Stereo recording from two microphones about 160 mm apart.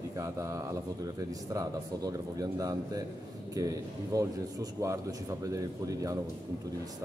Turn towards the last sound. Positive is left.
turn(degrees=-20)  # may be behind; listen again after turning